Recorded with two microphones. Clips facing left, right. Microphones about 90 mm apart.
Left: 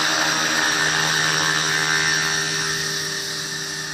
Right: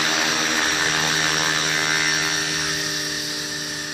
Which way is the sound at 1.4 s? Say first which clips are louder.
Left 1 dB; 45° left (ahead or behind).